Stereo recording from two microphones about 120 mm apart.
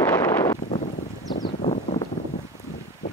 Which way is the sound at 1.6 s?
65° left (ahead or behind).